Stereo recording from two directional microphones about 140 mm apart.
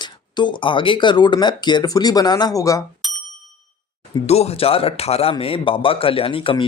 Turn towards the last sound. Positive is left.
turn(degrees=40)  # may be behind; listen again after turning